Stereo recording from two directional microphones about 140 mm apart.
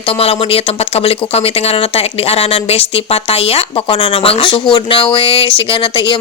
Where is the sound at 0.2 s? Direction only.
45° left (ahead or behind).